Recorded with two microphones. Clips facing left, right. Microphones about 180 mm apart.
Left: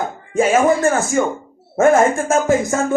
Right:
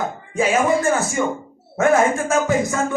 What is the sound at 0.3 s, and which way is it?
Music, 45° left (ahead or behind).